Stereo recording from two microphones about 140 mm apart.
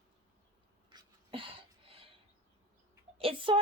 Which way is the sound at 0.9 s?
40° right (ahead or behind).